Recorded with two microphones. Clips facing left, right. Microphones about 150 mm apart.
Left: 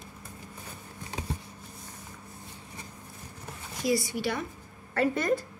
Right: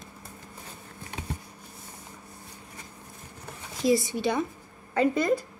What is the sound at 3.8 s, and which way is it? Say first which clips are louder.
Speech: right 4 dB; 25° right (ahead or behind).